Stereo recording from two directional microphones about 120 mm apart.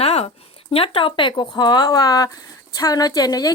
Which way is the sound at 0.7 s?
50° left (ahead or behind).